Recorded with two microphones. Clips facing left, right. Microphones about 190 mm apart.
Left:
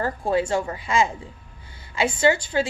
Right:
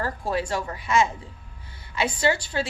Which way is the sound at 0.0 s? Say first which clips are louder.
Left 4 dB; 25° left (ahead or behind).